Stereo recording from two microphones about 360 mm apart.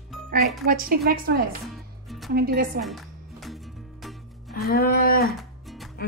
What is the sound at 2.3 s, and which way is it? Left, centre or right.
Speech, right.